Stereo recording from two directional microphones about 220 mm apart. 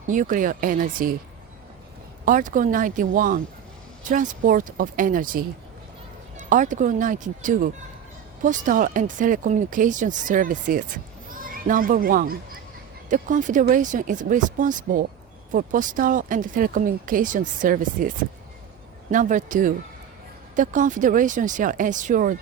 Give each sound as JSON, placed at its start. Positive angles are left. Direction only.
{"t": 0.1, "sound": "speech", "side_deg": -35}
{"t": 2.2, "sound": "speech", "side_deg": -35}
{"t": 19.1, "sound": "speech", "side_deg": -35}